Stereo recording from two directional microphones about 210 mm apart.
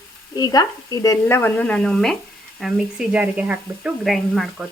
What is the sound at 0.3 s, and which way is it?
Speech, 20° left (ahead or behind).